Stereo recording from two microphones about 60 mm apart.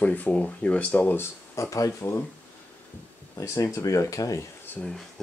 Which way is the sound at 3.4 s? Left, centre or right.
Left.